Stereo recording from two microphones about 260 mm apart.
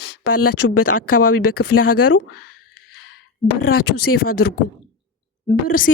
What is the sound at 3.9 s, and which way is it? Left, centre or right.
Speech, left.